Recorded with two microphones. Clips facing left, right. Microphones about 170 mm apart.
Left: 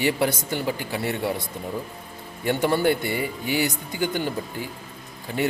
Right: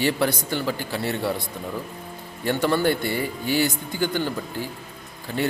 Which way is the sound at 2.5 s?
15° left (ahead or behind).